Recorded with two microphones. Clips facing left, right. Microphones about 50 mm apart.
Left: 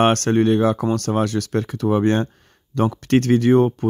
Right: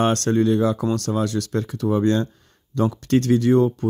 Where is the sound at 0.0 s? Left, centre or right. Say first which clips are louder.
Left 3 dB; left.